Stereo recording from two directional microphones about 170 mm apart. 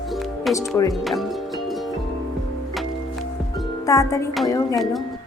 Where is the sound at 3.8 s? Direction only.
20° left (ahead or behind).